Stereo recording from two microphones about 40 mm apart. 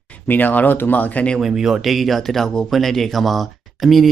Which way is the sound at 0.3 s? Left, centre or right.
Left.